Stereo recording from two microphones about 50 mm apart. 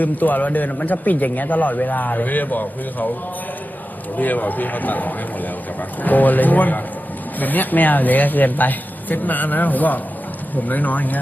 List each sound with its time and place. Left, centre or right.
0.0 s a man's voice: left
4.2 s a man's voice: left